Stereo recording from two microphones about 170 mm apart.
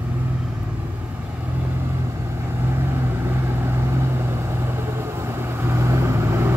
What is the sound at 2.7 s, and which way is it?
Vehicle, 15° right (ahead or behind).